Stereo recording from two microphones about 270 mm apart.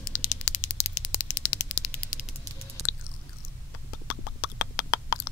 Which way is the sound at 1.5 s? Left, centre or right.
Left.